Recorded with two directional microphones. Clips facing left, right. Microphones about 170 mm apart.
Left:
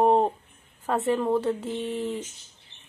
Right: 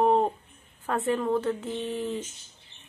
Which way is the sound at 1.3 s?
10° left (ahead or behind).